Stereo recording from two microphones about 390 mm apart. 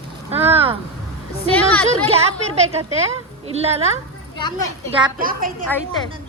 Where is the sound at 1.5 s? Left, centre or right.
Centre.